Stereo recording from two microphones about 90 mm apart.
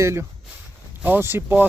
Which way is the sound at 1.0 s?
20° right (ahead or behind).